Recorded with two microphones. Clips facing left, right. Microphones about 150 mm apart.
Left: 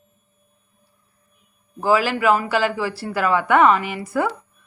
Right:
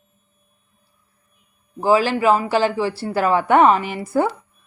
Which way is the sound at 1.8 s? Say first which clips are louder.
Right 2 dB; 25° right (ahead or behind).